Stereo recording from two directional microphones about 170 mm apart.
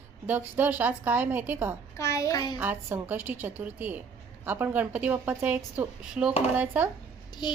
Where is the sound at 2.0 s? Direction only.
20° left (ahead or behind).